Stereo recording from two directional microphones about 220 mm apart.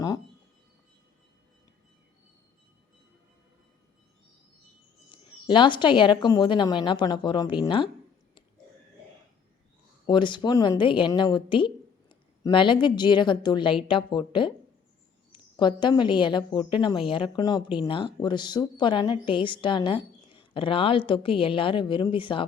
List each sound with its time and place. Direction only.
5.5 s a woman's voice: 20° left (ahead or behind)
10.1 s a woman's voice: 20° left (ahead or behind)